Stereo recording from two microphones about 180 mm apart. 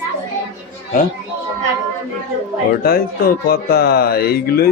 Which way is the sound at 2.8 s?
60° left (ahead or behind).